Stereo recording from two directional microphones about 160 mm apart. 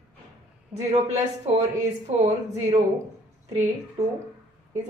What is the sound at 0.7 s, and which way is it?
A woman's voice, 35° right (ahead or behind).